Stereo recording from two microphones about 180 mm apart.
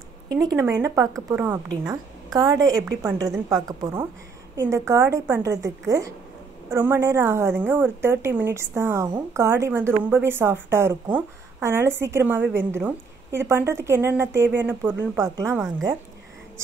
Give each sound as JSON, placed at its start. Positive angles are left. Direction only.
{"t": 0.3, "sound": "a woman's voice", "side_deg": -20}